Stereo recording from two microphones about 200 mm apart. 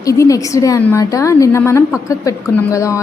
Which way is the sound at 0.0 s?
15° left (ahead or behind).